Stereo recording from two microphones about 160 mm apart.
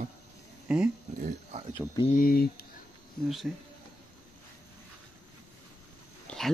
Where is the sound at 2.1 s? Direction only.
70° left (ahead or behind).